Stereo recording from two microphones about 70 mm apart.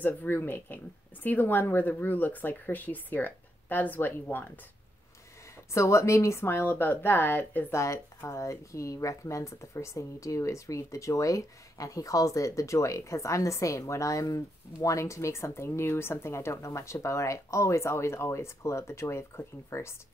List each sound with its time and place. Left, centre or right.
0.0 s speech: left
5.7 s speech: left
6.5 s speech: left
7.7 s speech: left